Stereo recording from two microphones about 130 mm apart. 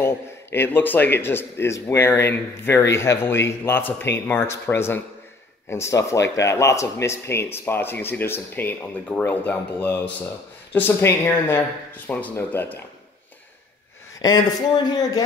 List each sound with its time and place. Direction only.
0.0 s speech: 20° left (ahead or behind)
14.2 s speech: 30° left (ahead or behind)